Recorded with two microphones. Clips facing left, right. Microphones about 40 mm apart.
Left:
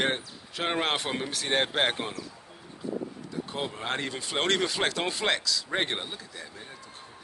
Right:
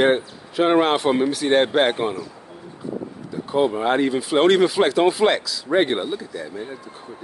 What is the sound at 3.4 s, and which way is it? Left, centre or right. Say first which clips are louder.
Speech: right 15 dB; centre.